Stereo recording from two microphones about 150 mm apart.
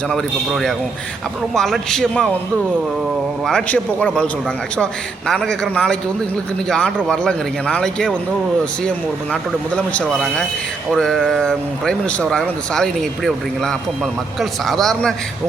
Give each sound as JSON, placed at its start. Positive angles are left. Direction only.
{"t": 0.1, "sound": "speech", "side_deg": 5}
{"t": 3.4, "sound": "a man's voice", "side_deg": 5}
{"t": 5.3, "sound": "speech", "side_deg": 5}
{"t": 9.3, "sound": "speech", "side_deg": 5}